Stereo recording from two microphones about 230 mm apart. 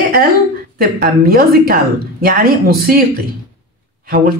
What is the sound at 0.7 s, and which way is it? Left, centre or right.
A woman's voice, right.